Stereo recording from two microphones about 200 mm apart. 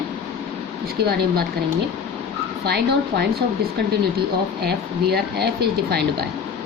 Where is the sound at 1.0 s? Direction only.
50° right (ahead or behind).